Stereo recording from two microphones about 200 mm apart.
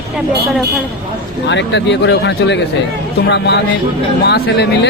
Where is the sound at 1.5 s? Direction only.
60° left (ahead or behind).